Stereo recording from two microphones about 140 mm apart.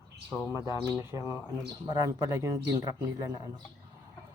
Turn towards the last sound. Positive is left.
turn(degrees=-25)  # may be behind; listen again after turning